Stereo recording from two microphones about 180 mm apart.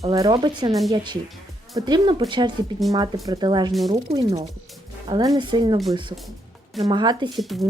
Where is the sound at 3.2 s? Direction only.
20° right (ahead or behind).